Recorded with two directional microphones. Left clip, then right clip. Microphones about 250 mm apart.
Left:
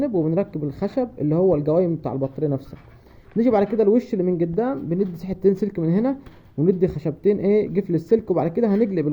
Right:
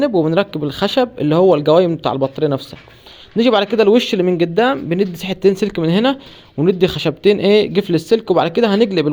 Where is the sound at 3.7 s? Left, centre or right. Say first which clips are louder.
Right 7 dB; centre.